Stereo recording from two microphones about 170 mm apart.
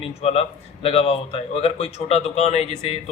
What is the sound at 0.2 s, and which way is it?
Speech, 35° left (ahead or behind).